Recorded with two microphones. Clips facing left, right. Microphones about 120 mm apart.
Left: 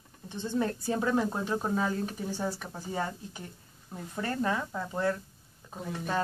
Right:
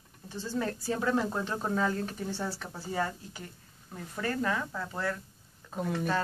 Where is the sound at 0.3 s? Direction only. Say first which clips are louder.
Left 3 dB; 20° left (ahead or behind).